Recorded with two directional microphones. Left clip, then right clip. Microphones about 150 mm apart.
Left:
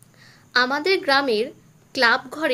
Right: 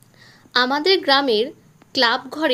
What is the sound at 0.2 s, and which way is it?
A woman's voice, 25° right (ahead or behind).